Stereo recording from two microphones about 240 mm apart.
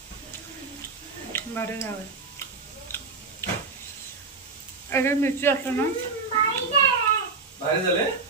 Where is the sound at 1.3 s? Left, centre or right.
Centre.